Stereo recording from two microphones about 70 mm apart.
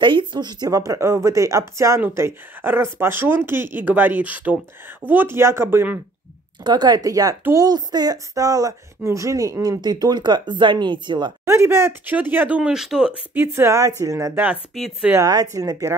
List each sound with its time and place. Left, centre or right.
0.3 s speech: right
0.7 s speech: right
0.9 s speech: right
6.6 s speech: right
7.5 s speech: right
11.4 s speech: right
12.4 s speech: centre
12.7 s speech: centre
13.5 s speech: right
14.3 s speech: right
15.2 s speech: right